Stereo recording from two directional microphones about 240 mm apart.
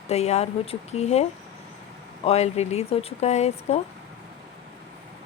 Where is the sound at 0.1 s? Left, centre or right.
Left.